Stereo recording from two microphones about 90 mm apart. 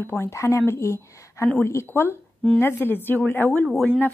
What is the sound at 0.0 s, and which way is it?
A woman's voice, 25° left (ahead or behind).